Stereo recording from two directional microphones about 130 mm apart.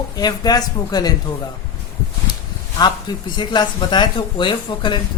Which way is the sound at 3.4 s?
35° left (ahead or behind).